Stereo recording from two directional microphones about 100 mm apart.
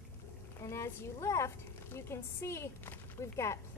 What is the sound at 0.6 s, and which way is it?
A woman's voice, 30° left (ahead or behind).